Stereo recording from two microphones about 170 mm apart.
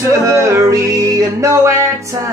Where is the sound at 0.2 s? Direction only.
15° right (ahead or behind).